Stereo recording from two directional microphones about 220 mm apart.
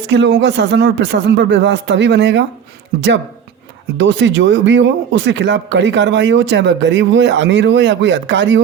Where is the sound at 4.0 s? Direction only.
55° right (ahead or behind).